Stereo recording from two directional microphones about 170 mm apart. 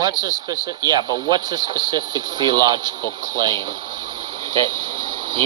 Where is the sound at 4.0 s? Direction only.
25° right (ahead or behind).